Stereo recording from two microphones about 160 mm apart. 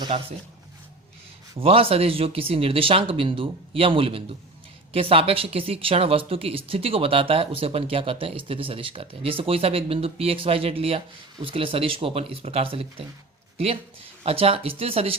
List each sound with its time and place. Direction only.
0.1 s speech: 35° right (ahead or behind)
1.5 s speech: 35° right (ahead or behind)